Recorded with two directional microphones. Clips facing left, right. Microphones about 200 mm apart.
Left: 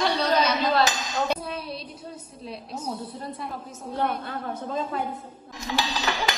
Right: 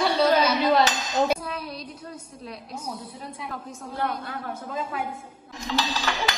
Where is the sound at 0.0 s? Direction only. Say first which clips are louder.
Right 3 dB; 10° right (ahead or behind).